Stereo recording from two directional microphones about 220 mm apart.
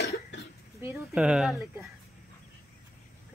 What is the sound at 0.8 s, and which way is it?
Speech, 5° right (ahead or behind).